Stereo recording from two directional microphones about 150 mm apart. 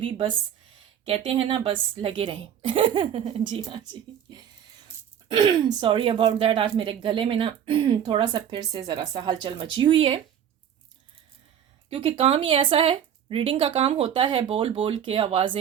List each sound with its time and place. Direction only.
0.0 s speech: 40° right (ahead or behind)
11.9 s speech: 40° right (ahead or behind)